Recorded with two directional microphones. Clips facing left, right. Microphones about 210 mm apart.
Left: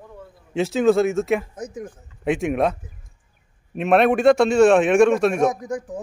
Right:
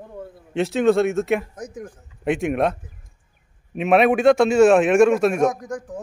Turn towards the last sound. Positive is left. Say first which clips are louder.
# even
turn(degrees=10)  # may be behind; listen again after turning